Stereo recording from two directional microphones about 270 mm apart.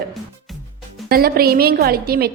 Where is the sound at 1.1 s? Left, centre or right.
Right.